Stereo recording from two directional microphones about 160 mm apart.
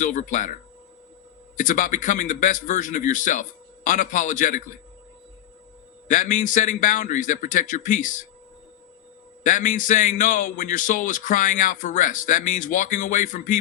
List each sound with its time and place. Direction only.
0.0 s a man's voice: 50° left (ahead or behind)
6.1 s a man's voice: 50° left (ahead or behind)
9.4 s a man's voice: 55° left (ahead or behind)